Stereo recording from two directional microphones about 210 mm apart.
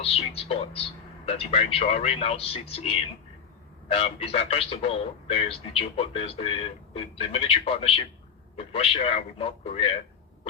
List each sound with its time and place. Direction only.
0.0 s speech: 25° left (ahead or behind)